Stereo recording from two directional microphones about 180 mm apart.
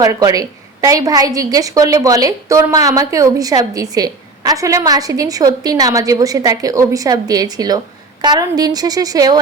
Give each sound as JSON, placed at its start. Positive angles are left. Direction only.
{"t": 0.0, "sound": "a woman's voice", "side_deg": -20}